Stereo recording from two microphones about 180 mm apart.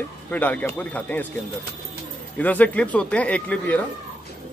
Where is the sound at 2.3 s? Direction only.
10° left (ahead or behind).